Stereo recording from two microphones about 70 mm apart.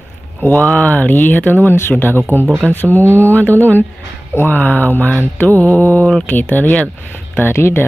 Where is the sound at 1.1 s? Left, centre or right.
Left.